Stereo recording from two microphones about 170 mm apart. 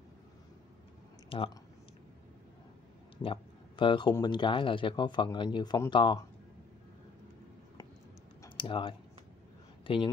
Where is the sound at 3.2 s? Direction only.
30° left (ahead or behind).